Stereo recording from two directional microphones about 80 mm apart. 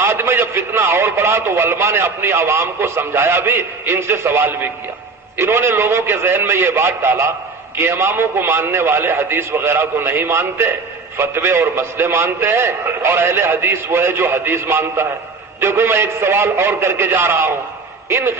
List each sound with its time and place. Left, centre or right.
0.0 s a man's voice: right